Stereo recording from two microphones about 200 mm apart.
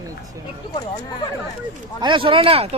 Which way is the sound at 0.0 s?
20° right (ahead or behind).